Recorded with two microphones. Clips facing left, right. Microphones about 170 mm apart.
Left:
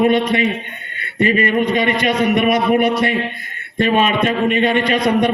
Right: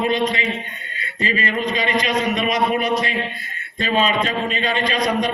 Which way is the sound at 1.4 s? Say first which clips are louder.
Left 6 dB; 60° left (ahead or behind).